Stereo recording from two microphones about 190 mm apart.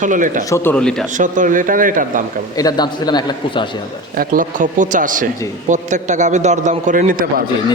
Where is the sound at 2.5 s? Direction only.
20° left (ahead or behind).